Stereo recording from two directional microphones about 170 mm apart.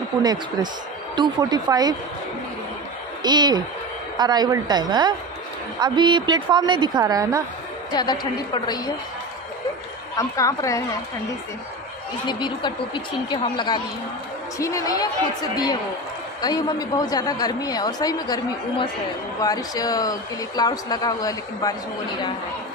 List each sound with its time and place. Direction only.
0.2 s a woman's voice: 25° right (ahead or behind)
3.2 s a woman's voice: 25° right (ahead or behind)
7.9 s a woman's voice: 25° left (ahead or behind)
10.1 s a woman's voice: 20° left (ahead or behind)
12.3 s a woman's voice: 25° left (ahead or behind)